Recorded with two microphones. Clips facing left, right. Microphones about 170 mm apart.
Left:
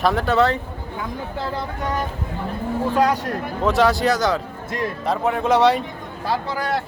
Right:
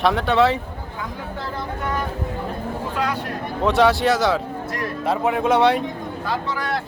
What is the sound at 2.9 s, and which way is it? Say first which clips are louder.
Speech: left 7 dB; 40° left (ahead or behind).